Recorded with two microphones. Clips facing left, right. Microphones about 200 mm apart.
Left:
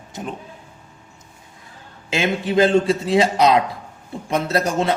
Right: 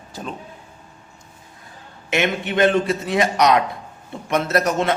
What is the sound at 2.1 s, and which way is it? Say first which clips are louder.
A man's voice: left 1 dB; 25° left (ahead or behind).